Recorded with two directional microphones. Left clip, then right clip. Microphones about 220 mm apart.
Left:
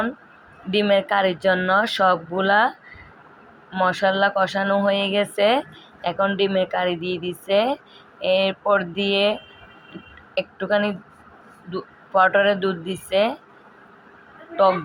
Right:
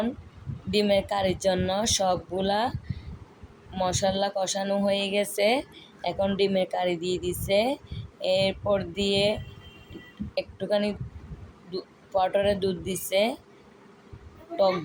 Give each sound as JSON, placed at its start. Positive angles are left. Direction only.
{"t": 0.7, "sound": "a woman's voice", "side_deg": -5}
{"t": 11.7, "sound": "a sound", "side_deg": 15}
{"t": 12.2, "sound": "speech", "side_deg": -5}
{"t": 14.5, "sound": "speech", "side_deg": 15}